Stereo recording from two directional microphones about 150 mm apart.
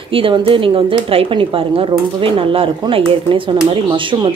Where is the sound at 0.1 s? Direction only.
35° right (ahead or behind).